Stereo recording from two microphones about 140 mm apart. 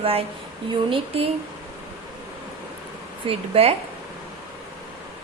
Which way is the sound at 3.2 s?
45° right (ahead or behind).